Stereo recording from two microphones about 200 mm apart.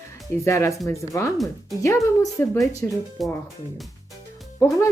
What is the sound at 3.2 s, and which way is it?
Speech, centre (ahead or behind).